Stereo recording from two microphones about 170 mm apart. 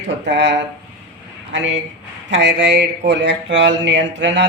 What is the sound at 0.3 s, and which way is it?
Speech, 90° right.